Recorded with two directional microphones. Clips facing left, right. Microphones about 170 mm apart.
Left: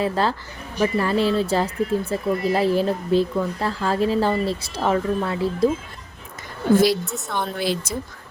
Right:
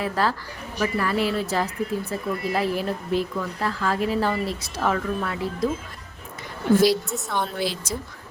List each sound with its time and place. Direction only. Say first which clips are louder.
0.0 s speech: left 3 dB; 25° left (ahead or behind)
7.0 s a woman's voice: even; centre (ahead or behind)
7.6 s speech: left 3 dB; 55° left (ahead or behind)